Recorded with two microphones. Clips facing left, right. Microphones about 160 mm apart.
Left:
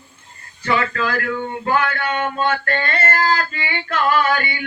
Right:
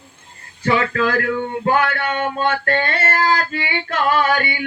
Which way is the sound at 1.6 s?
30° right (ahead or behind).